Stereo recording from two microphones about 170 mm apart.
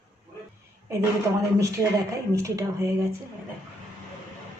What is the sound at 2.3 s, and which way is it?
Speech, 20° right (ahead or behind).